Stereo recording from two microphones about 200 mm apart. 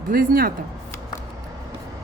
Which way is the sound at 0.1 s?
45° right (ahead or behind).